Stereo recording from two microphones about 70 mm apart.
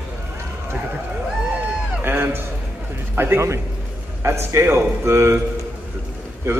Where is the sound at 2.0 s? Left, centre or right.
Right.